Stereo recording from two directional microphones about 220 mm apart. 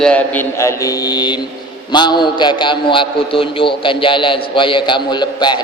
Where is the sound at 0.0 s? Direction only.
5° left (ahead or behind).